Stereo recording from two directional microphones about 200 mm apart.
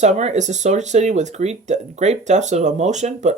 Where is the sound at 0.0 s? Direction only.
35° right (ahead or behind).